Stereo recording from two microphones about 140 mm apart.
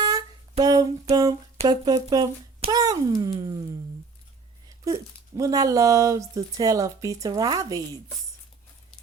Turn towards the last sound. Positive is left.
turn(degrees=-25)  # may be behind; listen again after turning